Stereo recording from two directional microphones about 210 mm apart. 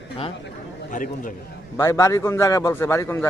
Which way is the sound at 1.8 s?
15° left (ahead or behind).